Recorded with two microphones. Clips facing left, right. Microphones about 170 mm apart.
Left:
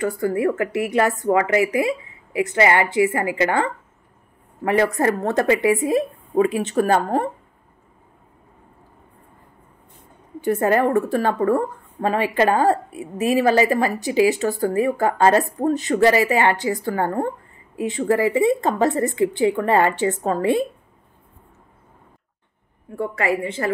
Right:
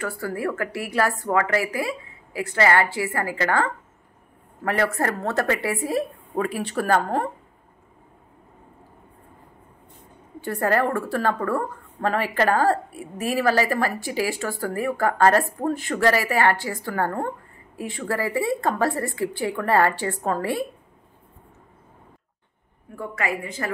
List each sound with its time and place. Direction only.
0.0 s a woman's voice: 20° left (ahead or behind)
10.4 s a woman's voice: 20° left (ahead or behind)
22.9 s a woman's voice: 30° left (ahead or behind)